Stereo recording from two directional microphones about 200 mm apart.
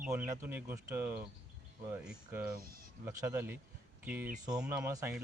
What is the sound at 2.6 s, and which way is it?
Speech, 50° right (ahead or behind).